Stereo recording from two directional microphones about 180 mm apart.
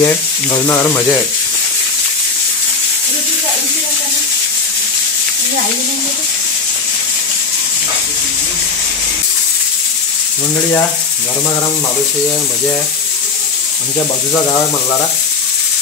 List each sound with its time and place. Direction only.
0.0 s speech: 15° left (ahead or behind)